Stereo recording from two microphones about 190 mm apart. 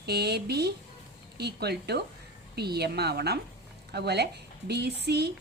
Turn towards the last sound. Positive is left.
turn(degrees=-60)  # may be behind; listen again after turning